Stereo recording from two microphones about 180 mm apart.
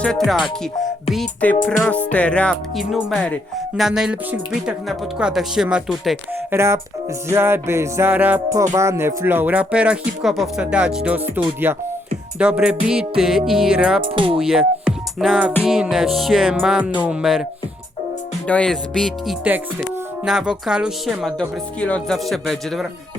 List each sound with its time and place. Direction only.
1.1 s speech: 5° left (ahead or behind)
1.9 s music: 10° left (ahead or behind)
3.8 s speech: 5° right (ahead or behind)
6.5 s speech: 15° right (ahead or behind)
14.0 s speech: 30° right (ahead or behind)
14.3 s speech: 5° right (ahead or behind)
18.4 s speech: 5° left (ahead or behind)